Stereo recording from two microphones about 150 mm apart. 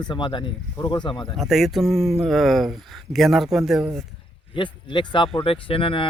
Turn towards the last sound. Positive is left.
turn(degrees=35)  # may be behind; listen again after turning